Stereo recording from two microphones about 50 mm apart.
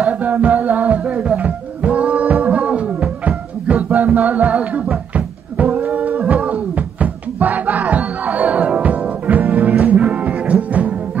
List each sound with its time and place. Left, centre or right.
0.0 s music: right
5.1 s a sound: right
8.8 s music: right